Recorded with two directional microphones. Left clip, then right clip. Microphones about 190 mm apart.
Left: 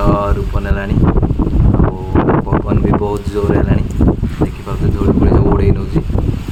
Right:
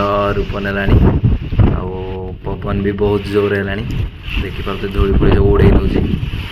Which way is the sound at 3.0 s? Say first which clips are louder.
Right 3 dB; 5° right (ahead or behind).